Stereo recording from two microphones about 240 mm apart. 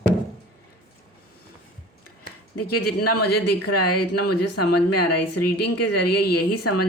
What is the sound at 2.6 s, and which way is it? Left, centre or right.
Speech, left.